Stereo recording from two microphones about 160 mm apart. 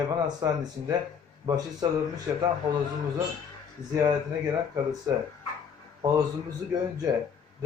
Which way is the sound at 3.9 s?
25° right (ahead or behind).